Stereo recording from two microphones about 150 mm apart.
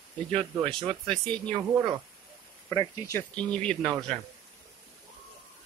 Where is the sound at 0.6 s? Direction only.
40° right (ahead or behind).